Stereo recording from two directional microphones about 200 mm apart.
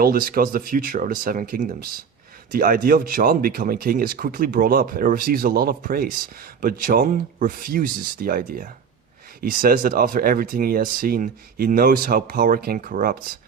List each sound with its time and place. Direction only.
0.0 s speech: 45° right (ahead or behind)